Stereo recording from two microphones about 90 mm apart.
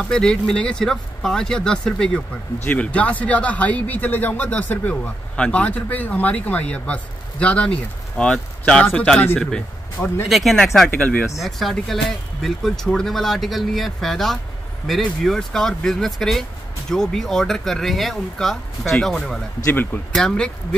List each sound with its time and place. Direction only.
0.0 s speech: 10° left (ahead or behind)
10.2 s speech: centre (ahead or behind)
10.9 s speech: 15° left (ahead or behind)
11.3 s speech: centre (ahead or behind)
19.7 s speech: 20° left (ahead or behind)
20.1 s speech: 10° left (ahead or behind)